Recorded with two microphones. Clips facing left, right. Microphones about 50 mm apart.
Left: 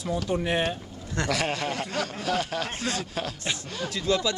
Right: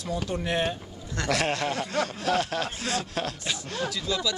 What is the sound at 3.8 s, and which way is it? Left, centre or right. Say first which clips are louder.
Speech: left 4 dB; left.